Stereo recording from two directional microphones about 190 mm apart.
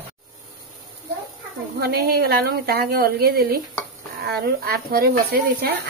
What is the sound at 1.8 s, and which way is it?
Speech, 55° right (ahead or behind).